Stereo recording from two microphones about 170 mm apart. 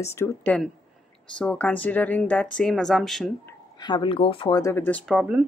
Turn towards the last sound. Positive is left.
turn(degrees=0)  # may be behind; listen again after turning